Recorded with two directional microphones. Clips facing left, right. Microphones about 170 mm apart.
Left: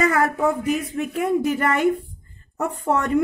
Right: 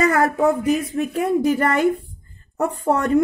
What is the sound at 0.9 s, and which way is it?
A woman's voice, 35° right (ahead or behind).